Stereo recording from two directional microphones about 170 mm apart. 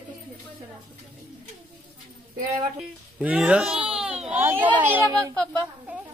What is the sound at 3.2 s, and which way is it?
A child's voice, 10° right (ahead or behind).